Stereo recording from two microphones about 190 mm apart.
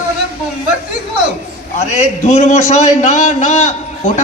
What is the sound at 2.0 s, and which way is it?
A man's voice, 35° left (ahead or behind).